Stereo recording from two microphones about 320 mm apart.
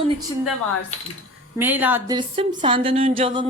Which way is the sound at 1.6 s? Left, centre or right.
Centre.